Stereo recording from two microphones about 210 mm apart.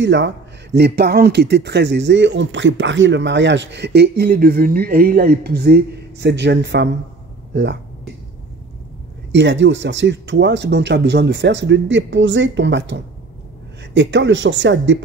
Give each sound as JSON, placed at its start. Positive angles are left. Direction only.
{"t": 0.0, "sound": "speech", "side_deg": -55}
{"t": 9.3, "sound": "speech", "side_deg": -60}